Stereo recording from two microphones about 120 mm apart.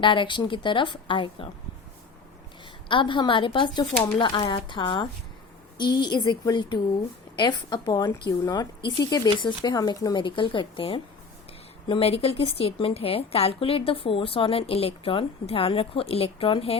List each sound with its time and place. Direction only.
0.0 s a woman's voice: 40° left (ahead or behind)
2.9 s a woman's voice: 40° left (ahead or behind)